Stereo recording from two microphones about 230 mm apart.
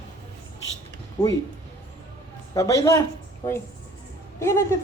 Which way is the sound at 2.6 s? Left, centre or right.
Centre.